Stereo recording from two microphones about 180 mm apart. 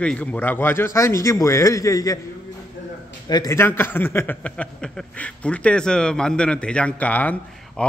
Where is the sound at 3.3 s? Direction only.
20° left (ahead or behind).